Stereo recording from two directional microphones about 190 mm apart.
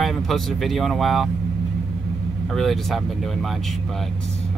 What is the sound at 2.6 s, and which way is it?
Speech, centre (ahead or behind).